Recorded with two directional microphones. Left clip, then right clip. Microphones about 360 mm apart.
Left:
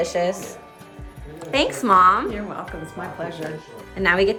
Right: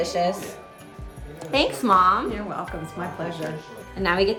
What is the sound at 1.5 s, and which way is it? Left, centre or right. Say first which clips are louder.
A woman's voice: left 2 dB; centre.